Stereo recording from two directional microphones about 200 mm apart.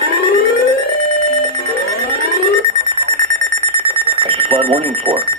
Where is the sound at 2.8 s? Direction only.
35° right (ahead or behind).